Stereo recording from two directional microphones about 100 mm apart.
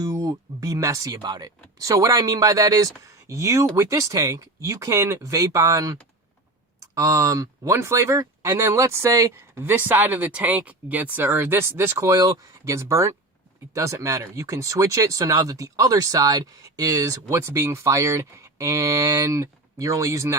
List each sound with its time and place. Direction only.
0.0 s speech: 35° right (ahead or behind)
9.6 s speech: 20° right (ahead or behind)